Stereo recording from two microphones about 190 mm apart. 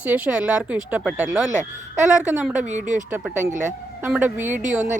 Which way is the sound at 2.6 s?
40° right (ahead or behind).